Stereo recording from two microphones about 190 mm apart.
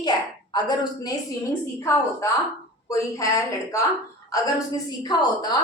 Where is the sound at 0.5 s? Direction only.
20° left (ahead or behind).